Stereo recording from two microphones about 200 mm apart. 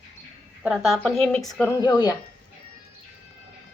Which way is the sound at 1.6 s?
15° left (ahead or behind).